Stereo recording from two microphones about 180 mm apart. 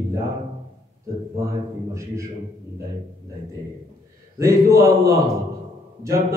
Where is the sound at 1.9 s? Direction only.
15° right (ahead or behind).